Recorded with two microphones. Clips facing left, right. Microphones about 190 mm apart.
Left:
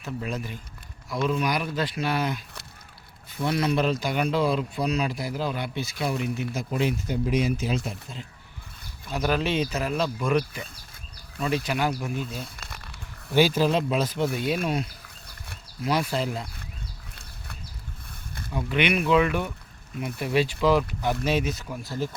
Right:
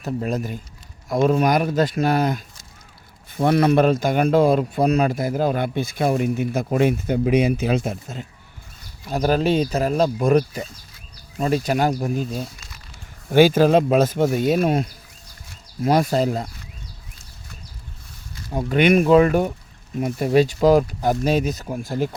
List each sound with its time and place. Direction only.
0.0 s speech: 40° right (ahead or behind)
3.3 s speech: 55° right (ahead or behind); by 12.5 s 40° right (ahead or behind)
12.5 s a sound: 60° left (ahead or behind)
13.3 s speech: 55° right (ahead or behind)
18.5 s speech: 45° right (ahead or behind)